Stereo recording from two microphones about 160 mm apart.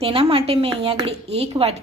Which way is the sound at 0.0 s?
35° right (ahead or behind).